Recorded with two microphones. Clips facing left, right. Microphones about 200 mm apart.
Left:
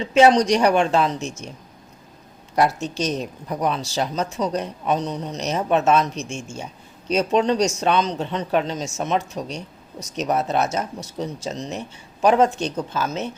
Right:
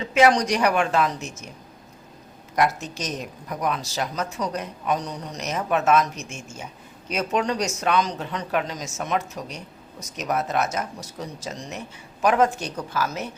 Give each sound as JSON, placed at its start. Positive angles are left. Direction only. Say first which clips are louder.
{"t": 0.0, "sound": "speech", "louder": "left 4 dB", "side_deg": 30}
{"t": 2.6, "sound": "speech", "louder": "left 3 dB", "side_deg": 30}
{"t": 6.1, "sound": "a man's voice", "louder": "left 7 dB", "side_deg": -5}
{"t": 7.1, "sound": "speech", "louder": "left 5 dB", "side_deg": 30}